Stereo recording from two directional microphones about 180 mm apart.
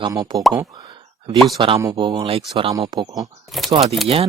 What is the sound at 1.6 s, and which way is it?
Speech, 30° right (ahead or behind).